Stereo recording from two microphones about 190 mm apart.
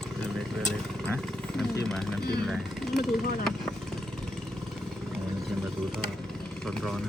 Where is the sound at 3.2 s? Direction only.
50° left (ahead or behind).